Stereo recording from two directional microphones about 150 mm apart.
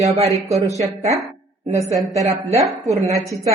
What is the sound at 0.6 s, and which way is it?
Speech, 20° right (ahead or behind).